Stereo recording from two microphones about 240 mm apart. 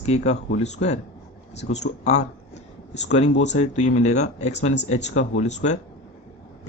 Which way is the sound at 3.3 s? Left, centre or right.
Left.